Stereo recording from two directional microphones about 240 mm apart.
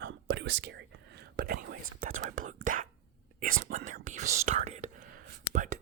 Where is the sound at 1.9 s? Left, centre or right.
Right.